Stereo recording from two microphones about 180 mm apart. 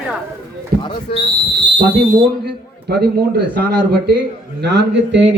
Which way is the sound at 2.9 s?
65° right (ahead or behind).